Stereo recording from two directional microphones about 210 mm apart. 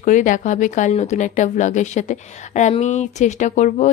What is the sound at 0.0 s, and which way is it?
Speech, 35° left (ahead or behind).